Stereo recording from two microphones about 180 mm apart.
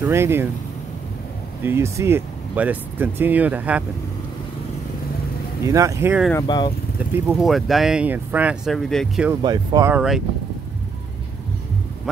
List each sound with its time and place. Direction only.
0.0 s speech: 15° right (ahead or behind)
1.6 s speech: 15° right (ahead or behind)
5.7 s speech: 15° right (ahead or behind)
6.4 s speech: 25° left (ahead or behind)
7.0 s speech: 5° right (ahead or behind)
9.4 s speech: 25° right (ahead or behind)
9.9 s speech: centre (ahead or behind)